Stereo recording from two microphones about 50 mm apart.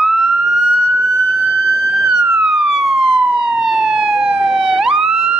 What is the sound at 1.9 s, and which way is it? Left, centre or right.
Police car, centre.